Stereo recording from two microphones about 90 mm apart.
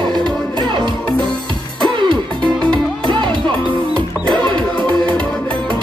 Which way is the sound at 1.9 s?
65° right (ahead or behind).